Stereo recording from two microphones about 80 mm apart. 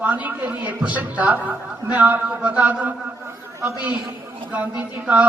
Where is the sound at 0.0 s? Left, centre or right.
Right.